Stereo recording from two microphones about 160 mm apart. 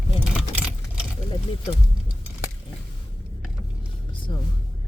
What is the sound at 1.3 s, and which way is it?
Speech, 40° left (ahead or behind).